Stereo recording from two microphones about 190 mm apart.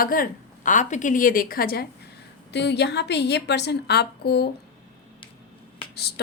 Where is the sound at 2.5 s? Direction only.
65° left (ahead or behind).